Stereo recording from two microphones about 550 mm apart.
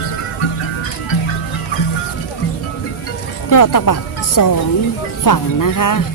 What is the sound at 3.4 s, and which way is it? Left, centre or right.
Speech, left.